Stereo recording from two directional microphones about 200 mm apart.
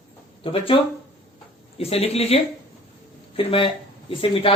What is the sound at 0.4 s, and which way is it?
Speech, 25° left (ahead or behind).